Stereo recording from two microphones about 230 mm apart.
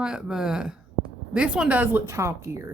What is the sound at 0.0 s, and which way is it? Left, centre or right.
Speech, centre.